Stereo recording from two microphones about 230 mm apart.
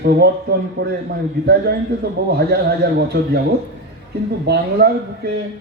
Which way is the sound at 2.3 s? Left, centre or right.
Right.